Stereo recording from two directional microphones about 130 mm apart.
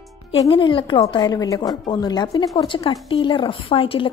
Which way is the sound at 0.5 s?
40° left (ahead or behind).